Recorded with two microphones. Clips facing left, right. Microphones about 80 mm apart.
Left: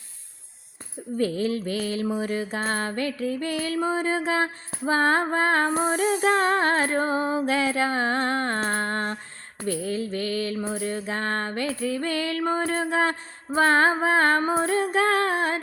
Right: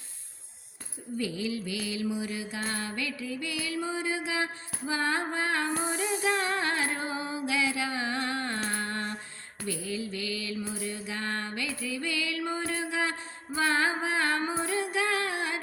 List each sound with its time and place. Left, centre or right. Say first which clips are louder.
1.2 s mantra: left 8 dB; left